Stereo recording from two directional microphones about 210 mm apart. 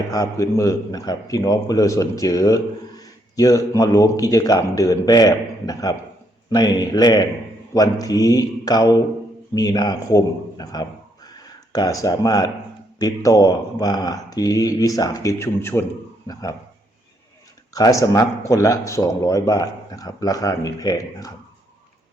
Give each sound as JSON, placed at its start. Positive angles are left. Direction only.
{"t": 0.1, "sound": "speech", "side_deg": 15}
{"t": 17.7, "sound": "speech", "side_deg": 15}